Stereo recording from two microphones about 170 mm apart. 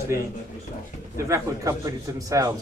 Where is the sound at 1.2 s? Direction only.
20° right (ahead or behind).